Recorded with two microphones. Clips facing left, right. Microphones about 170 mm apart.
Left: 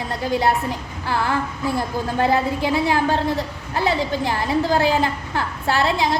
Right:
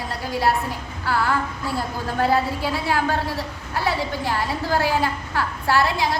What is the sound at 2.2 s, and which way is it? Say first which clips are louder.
A woman's voice: left 1 dB; 20° left (ahead or behind).